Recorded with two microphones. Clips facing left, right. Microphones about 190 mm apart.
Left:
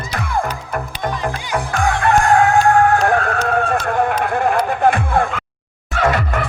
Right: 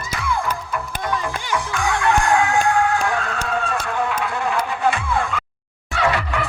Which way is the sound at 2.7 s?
55° left (ahead or behind).